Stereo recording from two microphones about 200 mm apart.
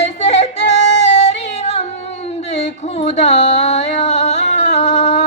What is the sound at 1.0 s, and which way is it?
Female singing, 35° left (ahead or behind).